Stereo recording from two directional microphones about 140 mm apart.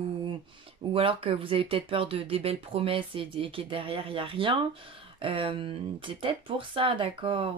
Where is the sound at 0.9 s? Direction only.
40° right (ahead or behind).